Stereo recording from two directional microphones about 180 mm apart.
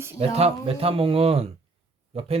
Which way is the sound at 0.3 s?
35° right (ahead or behind).